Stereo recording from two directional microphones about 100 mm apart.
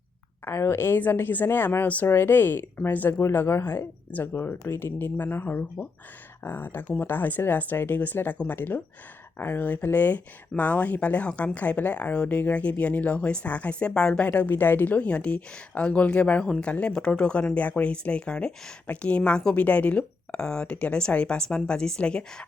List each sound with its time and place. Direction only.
0.4 s a woman's voice: 25° left (ahead or behind); by 22.4 s 10° left (ahead or behind)